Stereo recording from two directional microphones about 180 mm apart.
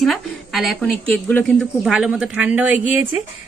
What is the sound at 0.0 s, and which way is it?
A woman's voice, centre (ahead or behind).